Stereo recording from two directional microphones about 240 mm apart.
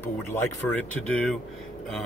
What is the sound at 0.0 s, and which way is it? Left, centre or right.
Speech, centre.